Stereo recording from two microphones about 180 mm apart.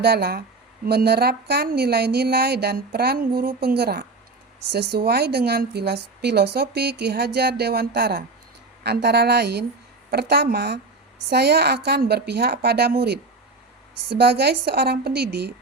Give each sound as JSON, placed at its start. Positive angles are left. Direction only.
{"t": 0.0, "sound": "a woman's voice", "side_deg": -65}